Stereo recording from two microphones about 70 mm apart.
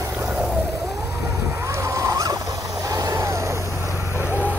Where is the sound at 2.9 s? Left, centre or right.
Right.